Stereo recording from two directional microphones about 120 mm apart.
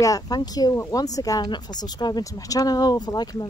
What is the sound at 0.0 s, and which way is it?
Speech, 30° left (ahead or behind).